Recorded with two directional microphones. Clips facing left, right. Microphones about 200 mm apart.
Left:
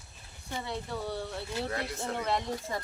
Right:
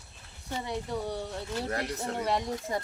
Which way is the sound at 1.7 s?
40° right (ahead or behind).